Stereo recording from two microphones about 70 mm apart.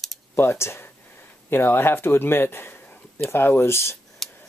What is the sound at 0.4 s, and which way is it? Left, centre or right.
Speech, left.